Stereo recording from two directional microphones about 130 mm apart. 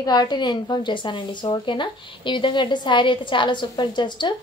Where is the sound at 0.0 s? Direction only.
30° left (ahead or behind).